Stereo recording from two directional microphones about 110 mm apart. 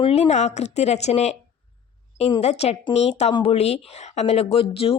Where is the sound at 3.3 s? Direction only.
50° left (ahead or behind).